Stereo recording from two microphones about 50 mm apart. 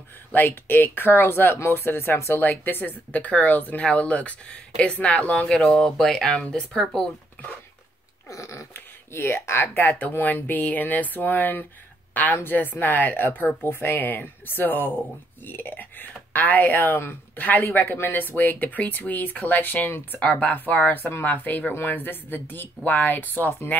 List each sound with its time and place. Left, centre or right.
0.3 s speech: left
2.4 s speech: left
5.7 s speech: centre
6.8 s speech: centre
8.3 s a sound: left
8.7 s a woman's voice: left
20.2 s speech: left